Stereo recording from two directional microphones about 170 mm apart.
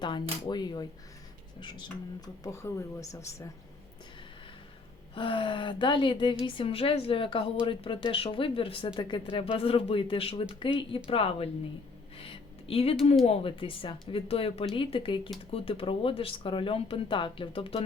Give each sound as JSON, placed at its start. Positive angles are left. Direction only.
{"t": 0.0, "sound": "speech", "side_deg": 25}
{"t": 5.1, "sound": "speech", "side_deg": 30}
{"t": 12.1, "sound": "a sound", "side_deg": 35}
{"t": 13.2, "sound": "speech", "side_deg": 35}